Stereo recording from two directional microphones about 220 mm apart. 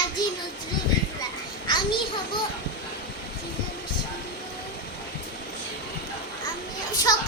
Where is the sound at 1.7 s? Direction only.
20° left (ahead or behind).